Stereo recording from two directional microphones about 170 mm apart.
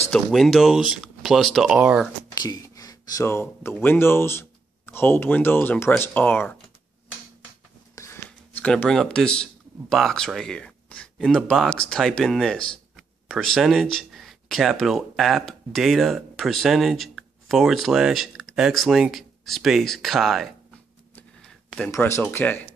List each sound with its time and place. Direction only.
0.1 s speech: centre (ahead or behind)
2.3 s speech: 25° left (ahead or behind)
7.9 s a sound: 15° left (ahead or behind)
8.3 s speech: 5° left (ahead or behind)
21.1 s a sound: 5° left (ahead or behind)
21.9 s speech: 15° left (ahead or behind)